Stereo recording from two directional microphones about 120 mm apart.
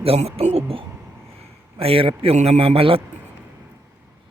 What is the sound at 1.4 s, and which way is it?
A man's voice, 55° right (ahead or behind).